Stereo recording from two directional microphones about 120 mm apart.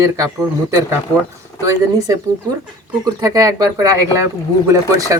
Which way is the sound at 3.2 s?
30° right (ahead or behind).